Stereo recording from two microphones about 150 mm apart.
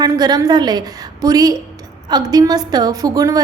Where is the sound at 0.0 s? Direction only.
25° right (ahead or behind).